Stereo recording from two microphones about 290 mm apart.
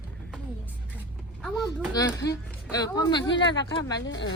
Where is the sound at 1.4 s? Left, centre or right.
Centre.